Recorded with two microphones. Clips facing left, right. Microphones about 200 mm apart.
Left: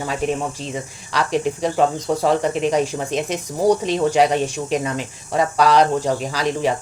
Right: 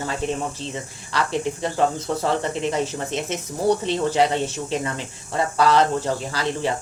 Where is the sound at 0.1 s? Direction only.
15° left (ahead or behind).